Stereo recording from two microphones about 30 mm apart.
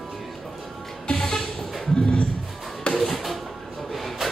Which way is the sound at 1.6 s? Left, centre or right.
Centre.